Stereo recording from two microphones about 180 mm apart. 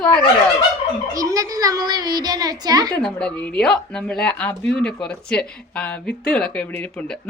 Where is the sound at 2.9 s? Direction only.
5° left (ahead or behind).